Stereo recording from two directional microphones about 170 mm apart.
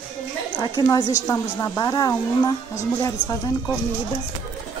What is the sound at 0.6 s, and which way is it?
A woman's voice, 25° left (ahead or behind).